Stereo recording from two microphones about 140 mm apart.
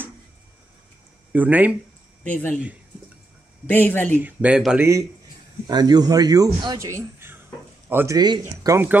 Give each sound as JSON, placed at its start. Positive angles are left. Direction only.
{"t": 1.3, "sound": "speech", "side_deg": -10}
{"t": 2.2, "sound": "speech", "side_deg": 10}
{"t": 3.6, "sound": "speech", "side_deg": 15}
{"t": 4.2, "sound": "speech", "side_deg": -10}
{"t": 4.7, "sound": "speech", "side_deg": -20}
{"t": 5.7, "sound": "speech", "side_deg": -30}